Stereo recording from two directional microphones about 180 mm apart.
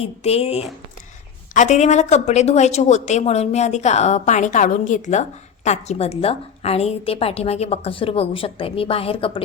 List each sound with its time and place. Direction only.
0.0 s a woman's voice: 35° left (ahead or behind)